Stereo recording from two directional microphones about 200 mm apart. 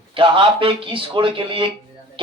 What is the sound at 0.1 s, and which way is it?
A man's voice, 25° right (ahead or behind).